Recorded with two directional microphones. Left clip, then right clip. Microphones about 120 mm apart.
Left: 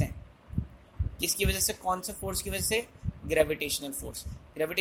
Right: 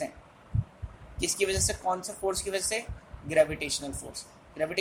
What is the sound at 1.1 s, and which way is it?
Speech, 40° left (ahead or behind).